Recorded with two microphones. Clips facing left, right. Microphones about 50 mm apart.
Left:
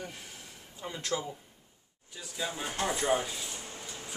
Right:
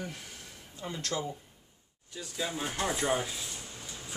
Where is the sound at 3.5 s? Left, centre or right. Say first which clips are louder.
Left 2 dB; left.